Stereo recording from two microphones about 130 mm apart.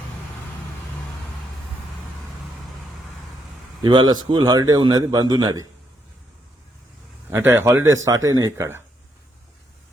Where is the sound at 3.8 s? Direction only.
35° right (ahead or behind).